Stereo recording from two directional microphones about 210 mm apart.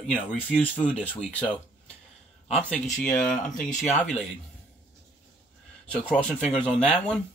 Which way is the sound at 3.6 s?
35° left (ahead or behind).